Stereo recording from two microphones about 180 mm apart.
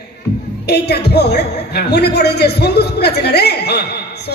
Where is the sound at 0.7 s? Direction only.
65° left (ahead or behind).